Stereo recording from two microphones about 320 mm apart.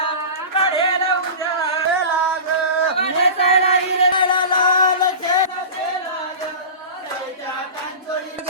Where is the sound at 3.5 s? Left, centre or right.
Centre.